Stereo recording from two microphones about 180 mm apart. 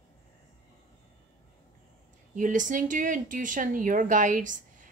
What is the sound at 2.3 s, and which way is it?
Speech, 45° right (ahead or behind).